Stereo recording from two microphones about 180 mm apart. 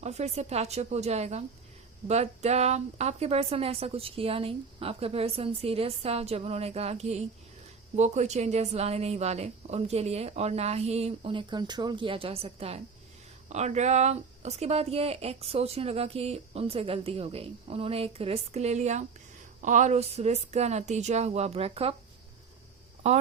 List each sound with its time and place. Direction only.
0.0 s speech: 35° right (ahead or behind)
23.0 s speech: 40° right (ahead or behind)